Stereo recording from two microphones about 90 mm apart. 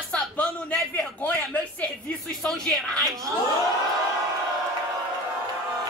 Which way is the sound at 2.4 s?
10° left (ahead or behind).